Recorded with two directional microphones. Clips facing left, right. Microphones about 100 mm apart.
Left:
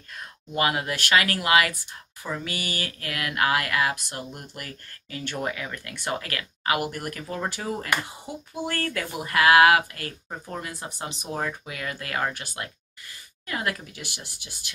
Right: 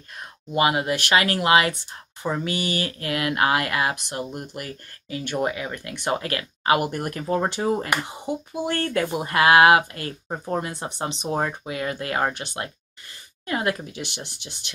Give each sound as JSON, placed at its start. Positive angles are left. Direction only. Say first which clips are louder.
{"t": 0.5, "sound": "speech", "louder": "right 4 dB", "side_deg": -20}